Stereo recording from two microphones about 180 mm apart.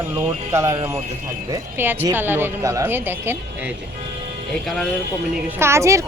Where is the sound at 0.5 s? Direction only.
15° right (ahead or behind).